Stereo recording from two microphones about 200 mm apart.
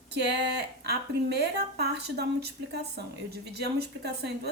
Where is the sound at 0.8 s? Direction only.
55° right (ahead or behind).